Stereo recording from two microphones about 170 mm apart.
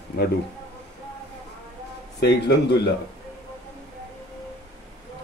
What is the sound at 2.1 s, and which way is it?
Speech, 75° left (ahead or behind).